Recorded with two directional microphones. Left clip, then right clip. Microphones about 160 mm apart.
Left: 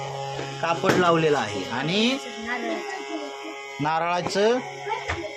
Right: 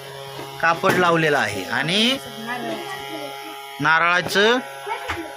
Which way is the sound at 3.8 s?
5° right (ahead or behind).